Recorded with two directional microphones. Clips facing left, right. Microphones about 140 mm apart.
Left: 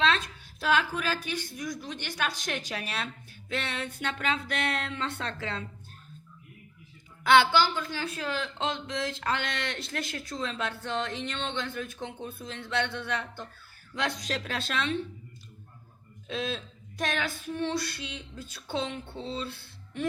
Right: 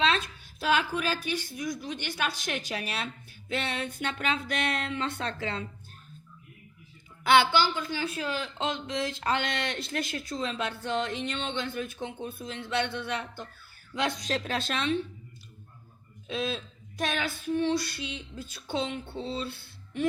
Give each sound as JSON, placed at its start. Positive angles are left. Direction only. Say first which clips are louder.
{"t": 0.6, "sound": "speech", "louder": "even", "side_deg": -15}
{"t": 7.3, "sound": "speech", "louder": "left 1 dB", "side_deg": -5}
{"t": 14.3, "sound": "a woman's voice", "louder": "right 3 dB", "side_deg": -25}
{"t": 17.6, "sound": "speech", "louder": "right 2 dB", "side_deg": -5}